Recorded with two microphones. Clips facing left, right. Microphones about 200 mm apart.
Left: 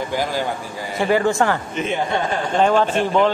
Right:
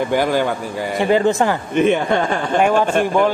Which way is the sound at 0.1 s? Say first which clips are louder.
Right 6 dB; 60° right (ahead or behind).